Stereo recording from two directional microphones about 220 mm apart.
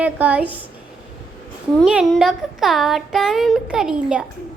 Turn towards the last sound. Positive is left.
turn(degrees=-5)  # may be behind; listen again after turning